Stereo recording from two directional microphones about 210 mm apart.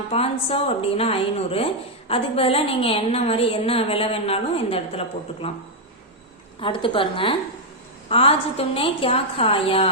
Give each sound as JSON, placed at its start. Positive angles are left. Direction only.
{"t": 0.1, "sound": "a woman's voice", "side_deg": 30}
{"t": 6.6, "sound": "a woman's voice", "side_deg": 25}